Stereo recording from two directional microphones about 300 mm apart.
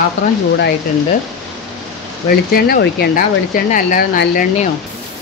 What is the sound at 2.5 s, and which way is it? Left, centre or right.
Speech, left.